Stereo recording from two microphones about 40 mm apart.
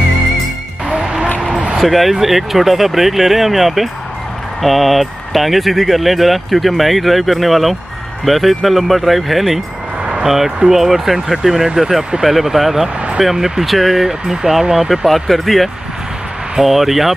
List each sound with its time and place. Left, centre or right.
0.8 s music: centre
1.8 s speech: centre
15.0 s speech: centre